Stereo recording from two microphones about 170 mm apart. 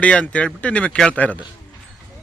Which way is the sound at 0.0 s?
5° left (ahead or behind).